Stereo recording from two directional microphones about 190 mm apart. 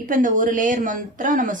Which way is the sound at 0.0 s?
45° right (ahead or behind).